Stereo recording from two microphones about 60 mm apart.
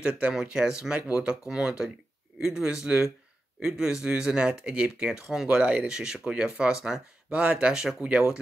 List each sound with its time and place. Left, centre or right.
0.0 s speech: centre
5.6 s speech: right
5.9 s speech: centre